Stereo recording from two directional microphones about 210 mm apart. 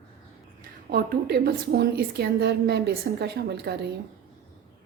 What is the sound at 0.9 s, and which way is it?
A woman's voice, 45° right (ahead or behind).